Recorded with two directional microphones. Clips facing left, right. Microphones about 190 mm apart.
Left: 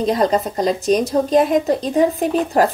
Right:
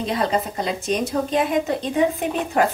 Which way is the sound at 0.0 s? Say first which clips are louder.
Left 5 dB; 40° left (ahead or behind).